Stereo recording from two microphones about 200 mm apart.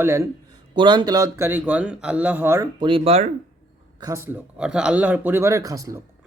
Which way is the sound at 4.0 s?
15° right (ahead or behind).